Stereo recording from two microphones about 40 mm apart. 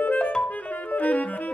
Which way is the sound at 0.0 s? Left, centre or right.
Left.